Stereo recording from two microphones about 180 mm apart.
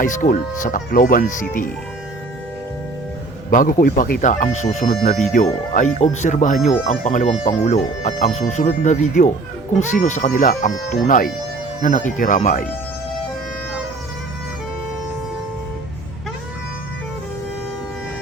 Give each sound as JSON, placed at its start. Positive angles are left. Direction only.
{"t": 0.0, "sound": "speech", "side_deg": 45}
{"t": 3.5, "sound": "speech", "side_deg": 50}